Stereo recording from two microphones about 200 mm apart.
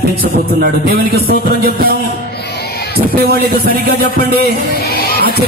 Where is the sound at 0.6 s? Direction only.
50° right (ahead or behind).